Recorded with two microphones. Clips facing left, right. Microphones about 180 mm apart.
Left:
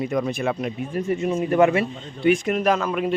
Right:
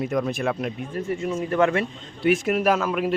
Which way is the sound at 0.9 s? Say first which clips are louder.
Left 5 dB; 20° left (ahead or behind).